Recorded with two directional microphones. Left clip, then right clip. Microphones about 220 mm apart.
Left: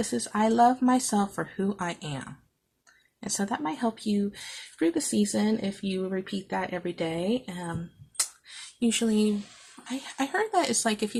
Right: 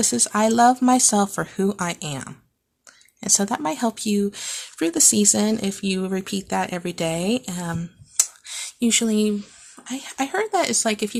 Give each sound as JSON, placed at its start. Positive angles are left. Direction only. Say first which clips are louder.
{"t": 0.0, "sound": "speech", "louder": "right 7 dB", "side_deg": -40}
{"t": 8.2, "sound": "a sound", "louder": "right 9 dB", "side_deg": -35}
{"t": 9.8, "sound": "speech", "louder": "right 5 dB", "side_deg": -30}